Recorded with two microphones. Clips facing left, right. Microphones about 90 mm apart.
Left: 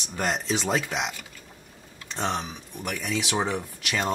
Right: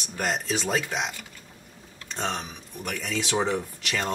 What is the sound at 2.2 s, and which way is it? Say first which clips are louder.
Speech: left 2 dB; 20° left (ahead or behind).